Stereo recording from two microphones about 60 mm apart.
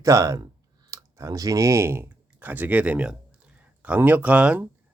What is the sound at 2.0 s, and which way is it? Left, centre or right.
Speech, right.